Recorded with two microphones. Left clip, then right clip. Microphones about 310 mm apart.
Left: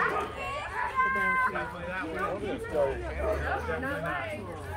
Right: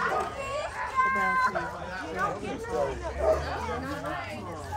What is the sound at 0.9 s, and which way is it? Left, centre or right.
Cat, right.